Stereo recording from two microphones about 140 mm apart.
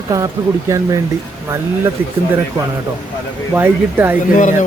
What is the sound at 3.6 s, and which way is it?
Speech, 15° right (ahead or behind).